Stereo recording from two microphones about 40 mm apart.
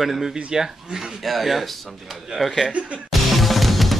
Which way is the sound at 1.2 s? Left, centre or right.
Centre.